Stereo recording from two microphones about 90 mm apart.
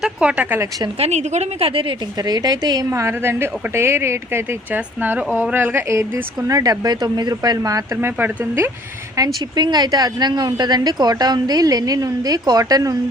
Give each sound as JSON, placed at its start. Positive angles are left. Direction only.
{"t": 0.0, "sound": "speech", "side_deg": -10}
{"t": 1.5, "sound": "a woman's voice", "side_deg": -90}
{"t": 2.2, "sound": "speech", "side_deg": -45}
{"t": 3.0, "sound": "speech", "side_deg": -30}
{"t": 6.5, "sound": "speech", "side_deg": -45}
{"t": 8.0, "sound": "speech", "side_deg": -25}
{"t": 9.1, "sound": "speech", "side_deg": -50}